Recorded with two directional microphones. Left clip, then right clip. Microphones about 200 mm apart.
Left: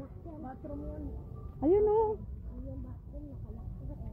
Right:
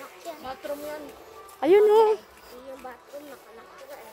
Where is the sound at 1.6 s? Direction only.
30° right (ahead or behind).